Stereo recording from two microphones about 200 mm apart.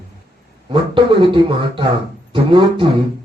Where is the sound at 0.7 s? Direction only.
25° right (ahead or behind).